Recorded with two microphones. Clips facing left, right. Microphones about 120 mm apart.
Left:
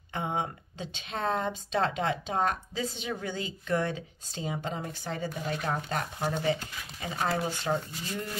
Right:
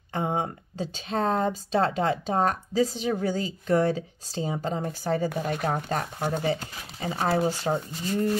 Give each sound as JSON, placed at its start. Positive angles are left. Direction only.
{"t": 0.1, "sound": "speech", "side_deg": -35}
{"t": 5.3, "sound": "speech", "side_deg": -50}
{"t": 5.7, "sound": "speech", "side_deg": -35}